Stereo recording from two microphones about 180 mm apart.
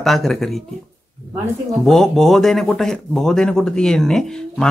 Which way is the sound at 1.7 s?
Centre (ahead or behind).